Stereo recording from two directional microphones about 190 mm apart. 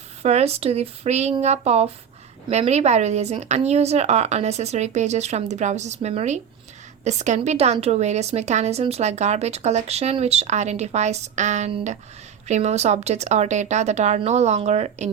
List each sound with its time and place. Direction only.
0.2 s a woman's voice: 35° right (ahead or behind)